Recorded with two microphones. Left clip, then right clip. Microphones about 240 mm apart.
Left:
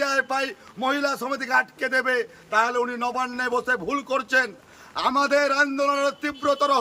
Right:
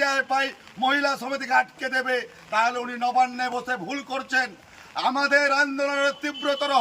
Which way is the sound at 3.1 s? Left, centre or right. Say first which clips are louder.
Right 2 dB; centre.